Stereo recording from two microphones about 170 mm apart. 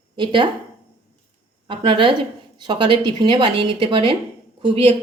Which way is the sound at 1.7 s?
30° right (ahead or behind).